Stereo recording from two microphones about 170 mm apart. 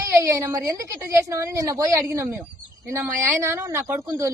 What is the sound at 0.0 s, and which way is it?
A woman's voice, 15° right (ahead or behind).